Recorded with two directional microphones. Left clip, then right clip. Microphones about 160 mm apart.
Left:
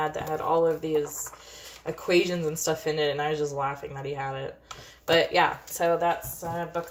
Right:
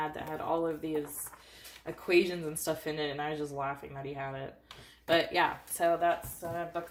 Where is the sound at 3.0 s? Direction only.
35° right (ahead or behind).